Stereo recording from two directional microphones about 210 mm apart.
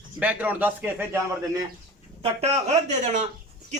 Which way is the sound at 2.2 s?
30° right (ahead or behind).